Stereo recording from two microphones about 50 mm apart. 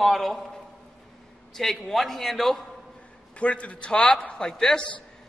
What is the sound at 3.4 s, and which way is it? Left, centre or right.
A man's voice, left.